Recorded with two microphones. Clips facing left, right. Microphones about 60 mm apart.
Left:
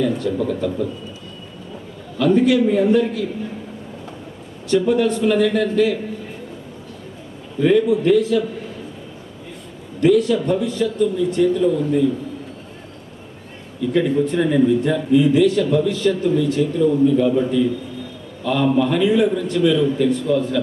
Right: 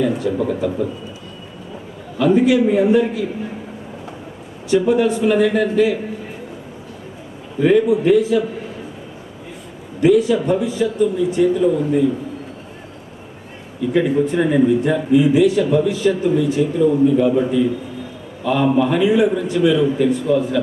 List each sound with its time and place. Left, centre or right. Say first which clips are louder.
0.0 s a man's voice: right 1 dB; centre
2.1 s a man's voice: right 1 dB; centre
4.7 s a man's voice: right 2 dB; centre
7.6 s a man's voice: right 1 dB; centre
10.0 s a man's voice: right 1 dB; centre
13.8 s a man's voice: right 1 dB; centre